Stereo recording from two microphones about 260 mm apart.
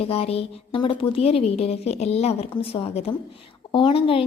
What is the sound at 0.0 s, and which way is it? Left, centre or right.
A woman's voice, left.